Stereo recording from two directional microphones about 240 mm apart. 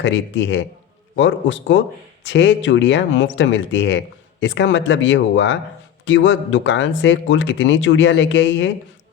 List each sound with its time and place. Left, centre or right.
0.0 s speech: left